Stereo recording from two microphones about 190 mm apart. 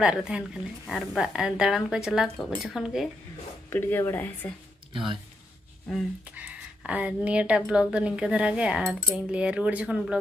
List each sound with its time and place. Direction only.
0.0 s speech: 5° right (ahead or behind)
3.7 s speech: 10° left (ahead or behind)
4.9 s speech: 25° right (ahead or behind)
6.3 s speech: 5° right (ahead or behind)